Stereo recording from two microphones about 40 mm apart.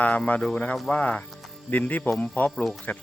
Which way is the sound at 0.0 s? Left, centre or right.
Left.